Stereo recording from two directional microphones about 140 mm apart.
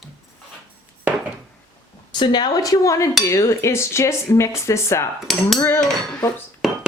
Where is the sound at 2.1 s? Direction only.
30° left (ahead or behind).